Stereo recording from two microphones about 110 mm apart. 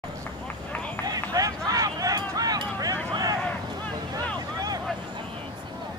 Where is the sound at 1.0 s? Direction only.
35° right (ahead or behind).